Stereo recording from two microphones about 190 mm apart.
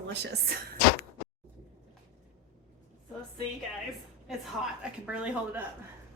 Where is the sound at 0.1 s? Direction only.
65° right (ahead or behind).